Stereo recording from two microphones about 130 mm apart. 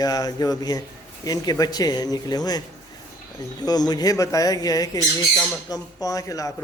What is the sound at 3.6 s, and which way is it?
Speech, 30° left (ahead or behind).